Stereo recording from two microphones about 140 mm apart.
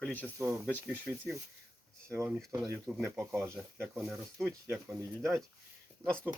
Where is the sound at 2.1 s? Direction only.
15° right (ahead or behind).